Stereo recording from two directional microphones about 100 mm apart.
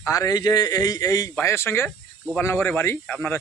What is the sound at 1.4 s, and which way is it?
Speech, 25° left (ahead or behind).